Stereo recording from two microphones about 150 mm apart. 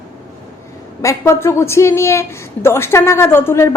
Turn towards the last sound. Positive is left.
turn(degrees=20)  # may be behind; listen again after turning